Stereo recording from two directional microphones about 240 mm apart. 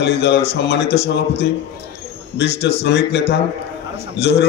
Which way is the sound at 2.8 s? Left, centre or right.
Left.